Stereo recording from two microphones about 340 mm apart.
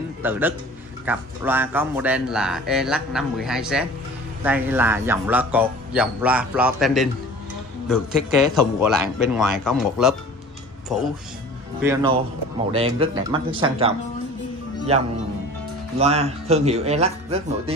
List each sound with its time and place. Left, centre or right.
0.2 s speech: centre
11.8 s speech: centre